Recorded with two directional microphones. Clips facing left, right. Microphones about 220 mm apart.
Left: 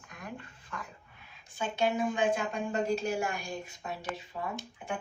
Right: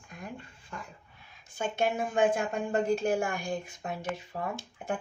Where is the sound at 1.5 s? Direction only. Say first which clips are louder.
Even; 50° right (ahead or behind).